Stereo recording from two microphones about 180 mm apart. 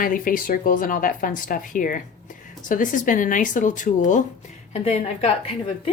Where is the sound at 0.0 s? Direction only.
50° left (ahead or behind).